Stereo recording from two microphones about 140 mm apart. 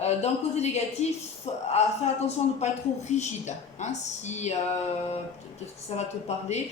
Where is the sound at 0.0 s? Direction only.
50° left (ahead or behind).